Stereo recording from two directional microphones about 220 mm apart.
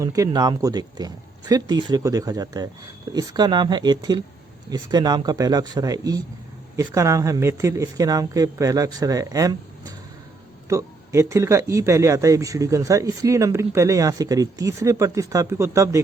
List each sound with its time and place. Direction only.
0.0 s speech: 15° right (ahead or behind)